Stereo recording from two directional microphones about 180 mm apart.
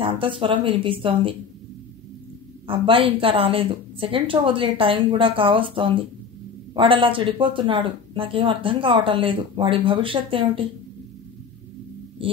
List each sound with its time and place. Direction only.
0.0 s speech: 30° right (ahead or behind)
2.6 s speech: 30° right (ahead or behind)
12.2 s a sound: 30° right (ahead or behind)